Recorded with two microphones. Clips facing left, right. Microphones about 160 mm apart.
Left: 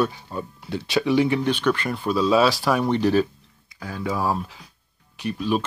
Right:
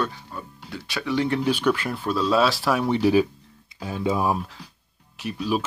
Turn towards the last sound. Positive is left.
turn(degrees=-5)  # may be behind; listen again after turning